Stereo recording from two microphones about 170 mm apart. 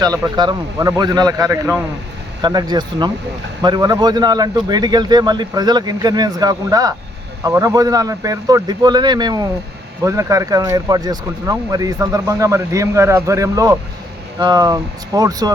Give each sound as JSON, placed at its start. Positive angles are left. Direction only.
{"t": 0.3, "sound": "speech", "side_deg": -25}